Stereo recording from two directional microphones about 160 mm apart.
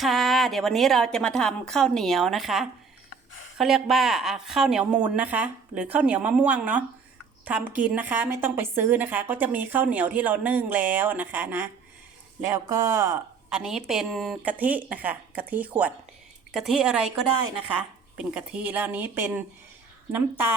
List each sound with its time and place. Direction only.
0.0 s a woman's voice: centre (ahead or behind); by 13.1 s 15° right (ahead or behind)
13.5 s a woman's voice: 5° right (ahead or behind)